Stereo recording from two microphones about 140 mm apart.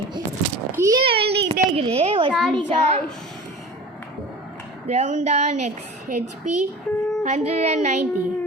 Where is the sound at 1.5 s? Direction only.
45° right (ahead or behind).